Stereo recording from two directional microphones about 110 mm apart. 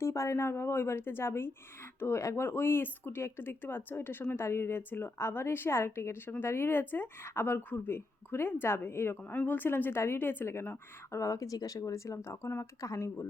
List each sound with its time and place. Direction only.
0.0 s speech: 25° left (ahead or behind)